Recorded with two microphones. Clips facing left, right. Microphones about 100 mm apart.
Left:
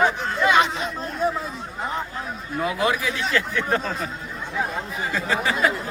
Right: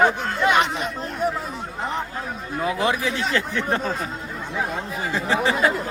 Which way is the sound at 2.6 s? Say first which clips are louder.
Right 1 dB; 30° right (ahead or behind).